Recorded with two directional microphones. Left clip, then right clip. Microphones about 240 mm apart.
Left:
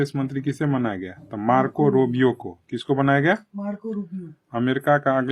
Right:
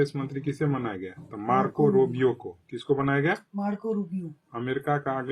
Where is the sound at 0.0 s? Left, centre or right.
Left.